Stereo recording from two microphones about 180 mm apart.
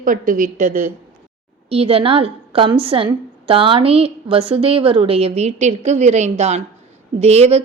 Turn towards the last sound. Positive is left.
turn(degrees=-35)  # may be behind; listen again after turning